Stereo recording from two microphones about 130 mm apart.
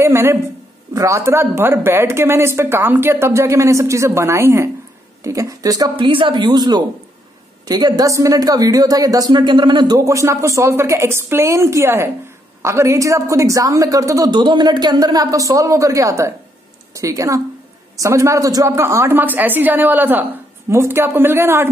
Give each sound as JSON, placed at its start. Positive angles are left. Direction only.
{"t": 0.0, "sound": "speech", "side_deg": -20}
{"t": 5.9, "sound": "speech", "side_deg": -40}